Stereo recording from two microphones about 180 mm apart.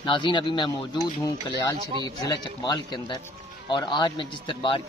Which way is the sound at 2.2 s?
20° left (ahead or behind).